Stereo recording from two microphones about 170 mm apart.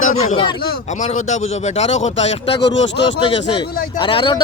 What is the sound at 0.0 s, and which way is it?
Speech, 40° left (ahead or behind).